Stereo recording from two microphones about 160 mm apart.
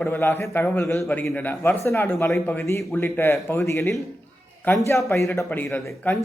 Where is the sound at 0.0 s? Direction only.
10° left (ahead or behind).